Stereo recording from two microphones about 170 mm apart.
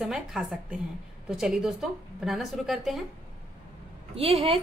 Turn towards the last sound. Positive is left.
turn(degrees=-35)  # may be behind; listen again after turning